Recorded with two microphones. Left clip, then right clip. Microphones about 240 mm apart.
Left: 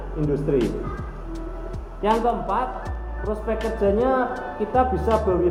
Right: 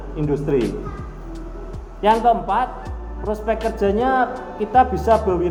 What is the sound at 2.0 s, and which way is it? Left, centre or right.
Speech, right.